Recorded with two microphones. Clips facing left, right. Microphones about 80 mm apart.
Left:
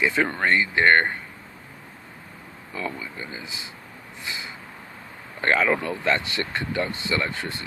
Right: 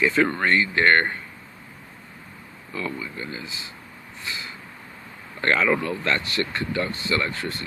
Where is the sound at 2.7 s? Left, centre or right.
Centre.